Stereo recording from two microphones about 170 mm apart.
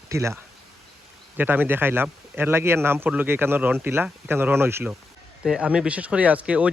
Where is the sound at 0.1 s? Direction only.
15° right (ahead or behind).